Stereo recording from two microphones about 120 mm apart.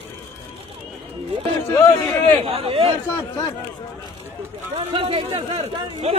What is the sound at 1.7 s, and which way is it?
Speech, 20° left (ahead or behind).